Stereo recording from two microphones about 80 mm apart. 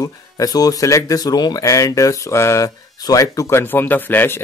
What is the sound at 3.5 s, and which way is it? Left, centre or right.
Speech, left.